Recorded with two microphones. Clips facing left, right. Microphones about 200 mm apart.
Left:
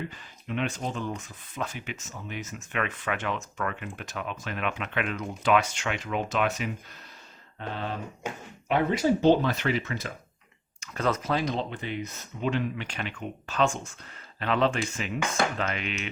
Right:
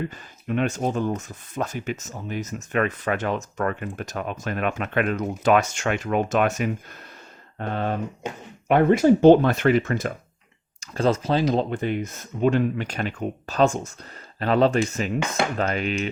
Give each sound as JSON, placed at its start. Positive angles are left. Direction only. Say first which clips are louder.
{"t": 0.4, "sound": "speech", "louder": "right 7 dB", "side_deg": -45}
{"t": 10.8, "sound": "speech", "louder": "right 6 dB", "side_deg": -30}
{"t": 11.5, "sound": "speech", "louder": "right 8 dB", "side_deg": -45}